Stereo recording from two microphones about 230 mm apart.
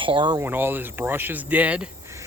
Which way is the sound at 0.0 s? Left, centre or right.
Right.